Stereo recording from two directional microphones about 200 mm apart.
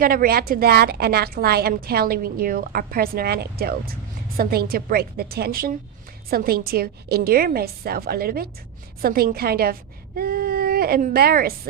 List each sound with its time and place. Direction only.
0.0 s a woman's voice: 45° right (ahead or behind)